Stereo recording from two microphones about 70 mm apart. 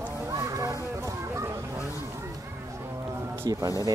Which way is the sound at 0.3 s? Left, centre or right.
Right.